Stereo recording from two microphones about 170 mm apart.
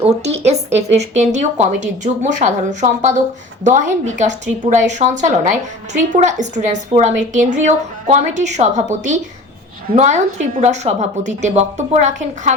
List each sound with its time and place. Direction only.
0.0 s a woman's voice: 40° right (ahead or behind)